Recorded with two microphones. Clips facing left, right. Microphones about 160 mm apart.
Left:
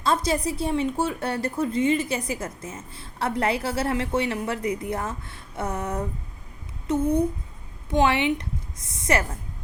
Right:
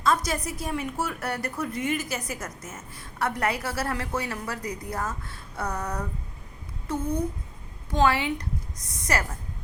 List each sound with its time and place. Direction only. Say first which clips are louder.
0.0 s speech: left 2 dB; 30° left (ahead or behind)
7.9 s speech: left 2 dB; 25° left (ahead or behind)